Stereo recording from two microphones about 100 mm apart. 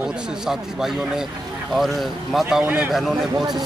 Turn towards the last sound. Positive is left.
turn(degrees=0)  # may be behind; listen again after turning